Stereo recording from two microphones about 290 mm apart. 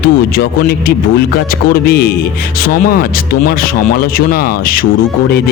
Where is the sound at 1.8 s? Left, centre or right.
Left.